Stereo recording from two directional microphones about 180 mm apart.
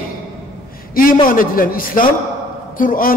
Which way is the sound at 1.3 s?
50° left (ahead or behind).